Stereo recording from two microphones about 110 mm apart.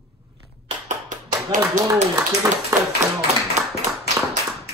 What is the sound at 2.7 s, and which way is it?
Speech, 30° right (ahead or behind).